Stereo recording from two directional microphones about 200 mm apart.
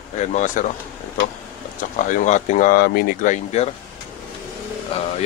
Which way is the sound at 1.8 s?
40° left (ahead or behind).